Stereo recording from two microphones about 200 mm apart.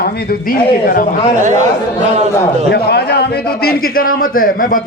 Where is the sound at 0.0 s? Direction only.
50° left (ahead or behind).